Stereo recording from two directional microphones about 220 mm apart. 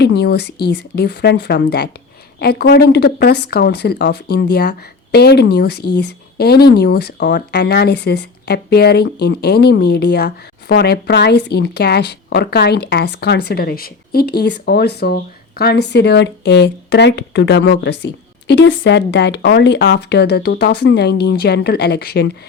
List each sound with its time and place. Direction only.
0.0 s speech: 50° left (ahead or behind)